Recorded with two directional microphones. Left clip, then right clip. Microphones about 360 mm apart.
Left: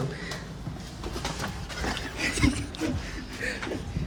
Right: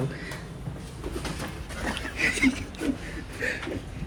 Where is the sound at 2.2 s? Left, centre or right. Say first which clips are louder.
Right 4 dB; centre.